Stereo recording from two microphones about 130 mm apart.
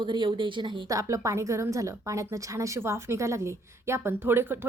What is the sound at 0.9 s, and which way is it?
A woman's voice, 25° right (ahead or behind).